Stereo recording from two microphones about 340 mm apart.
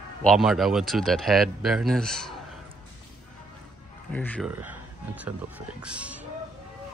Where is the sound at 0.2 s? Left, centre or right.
Centre.